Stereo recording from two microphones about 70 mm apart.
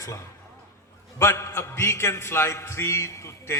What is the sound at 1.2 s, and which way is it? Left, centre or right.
A man's voice, left.